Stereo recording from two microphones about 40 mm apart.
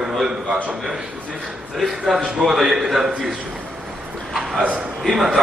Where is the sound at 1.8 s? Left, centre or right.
Centre.